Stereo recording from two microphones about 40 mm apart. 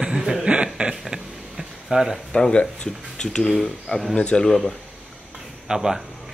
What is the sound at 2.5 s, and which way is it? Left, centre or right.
Speech, left.